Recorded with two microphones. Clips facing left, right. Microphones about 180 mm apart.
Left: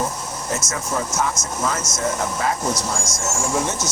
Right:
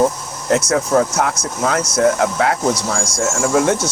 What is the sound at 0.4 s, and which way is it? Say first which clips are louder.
Speech: right 12 dB; 65° right (ahead or behind).